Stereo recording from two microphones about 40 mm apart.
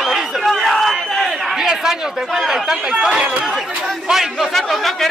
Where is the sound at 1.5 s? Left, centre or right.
Centre.